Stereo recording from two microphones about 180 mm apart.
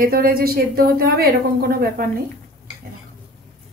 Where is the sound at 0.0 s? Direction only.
55° right (ahead or behind).